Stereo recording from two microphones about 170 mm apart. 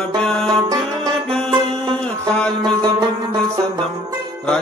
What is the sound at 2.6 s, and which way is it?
Music, 25° right (ahead or behind).